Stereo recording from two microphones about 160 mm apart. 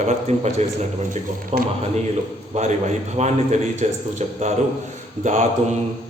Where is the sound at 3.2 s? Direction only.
45° right (ahead or behind).